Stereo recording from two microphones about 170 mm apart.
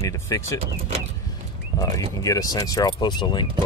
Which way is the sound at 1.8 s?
20° left (ahead or behind).